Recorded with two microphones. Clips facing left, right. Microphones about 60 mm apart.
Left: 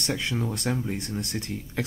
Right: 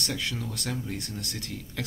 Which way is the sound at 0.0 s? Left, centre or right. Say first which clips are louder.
Left 4 dB; left.